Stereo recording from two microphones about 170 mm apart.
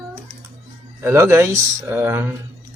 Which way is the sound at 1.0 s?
15° right (ahead or behind).